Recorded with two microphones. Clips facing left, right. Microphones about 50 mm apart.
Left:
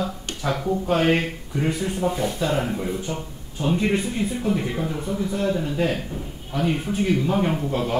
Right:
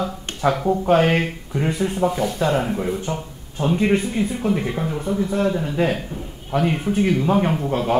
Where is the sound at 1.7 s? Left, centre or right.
Right.